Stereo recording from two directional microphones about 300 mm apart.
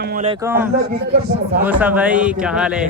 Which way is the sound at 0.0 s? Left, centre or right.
Right.